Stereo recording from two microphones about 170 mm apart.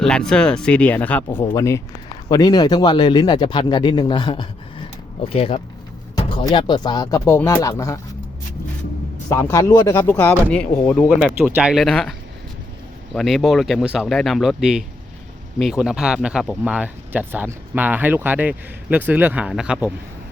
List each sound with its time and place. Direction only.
0.0 s speech: 5° left (ahead or behind)
9.3 s speech: 15° left (ahead or behind)
11.3 s speech: 10° right (ahead or behind)
13.1 s speech: centre (ahead or behind)